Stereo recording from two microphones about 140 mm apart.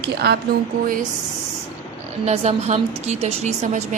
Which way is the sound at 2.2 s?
50° right (ahead or behind).